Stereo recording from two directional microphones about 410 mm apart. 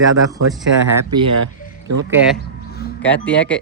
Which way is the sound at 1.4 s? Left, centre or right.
Right.